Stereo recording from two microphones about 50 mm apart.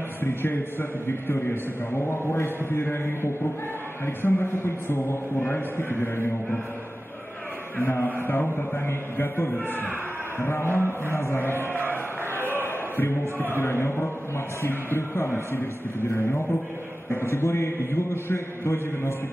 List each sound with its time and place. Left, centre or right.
0.2 s a man's voice: left
5.5 s a man's voice: left
7.7 s chant: left
8.7 s a man's voice: left
10.4 s a man's voice: left
12.4 s a sound: left
13.6 s a man's voice: left